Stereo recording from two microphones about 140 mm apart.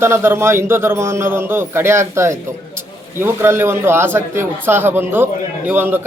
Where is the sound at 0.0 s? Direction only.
15° right (ahead or behind).